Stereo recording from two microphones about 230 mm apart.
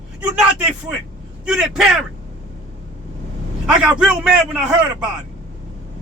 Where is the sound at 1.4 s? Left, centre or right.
Centre.